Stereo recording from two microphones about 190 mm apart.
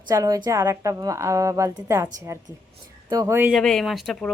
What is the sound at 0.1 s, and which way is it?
A woman's voice, 20° right (ahead or behind).